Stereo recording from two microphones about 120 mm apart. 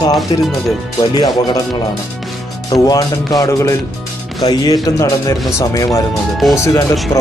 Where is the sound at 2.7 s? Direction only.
30° left (ahead or behind).